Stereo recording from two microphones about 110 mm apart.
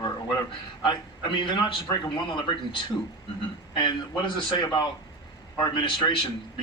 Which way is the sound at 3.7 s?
45° left (ahead or behind).